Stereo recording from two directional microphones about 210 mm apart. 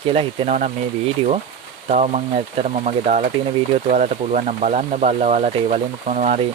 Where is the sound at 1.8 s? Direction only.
30° right (ahead or behind).